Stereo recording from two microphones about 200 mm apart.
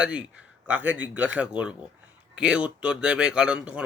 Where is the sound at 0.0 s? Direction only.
5° right (ahead or behind).